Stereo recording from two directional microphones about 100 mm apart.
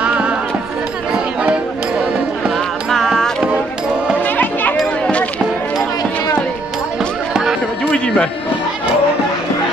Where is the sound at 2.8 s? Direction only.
Centre (ahead or behind).